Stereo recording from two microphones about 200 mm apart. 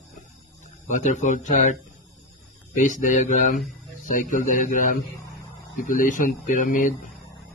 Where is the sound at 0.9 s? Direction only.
40° left (ahead or behind).